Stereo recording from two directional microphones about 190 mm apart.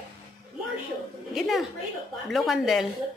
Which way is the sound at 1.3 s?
Centre (ahead or behind).